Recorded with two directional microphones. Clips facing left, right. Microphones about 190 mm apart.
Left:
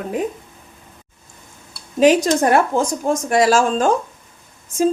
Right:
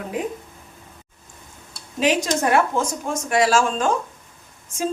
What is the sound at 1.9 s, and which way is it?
A woman's voice, 40° left (ahead or behind).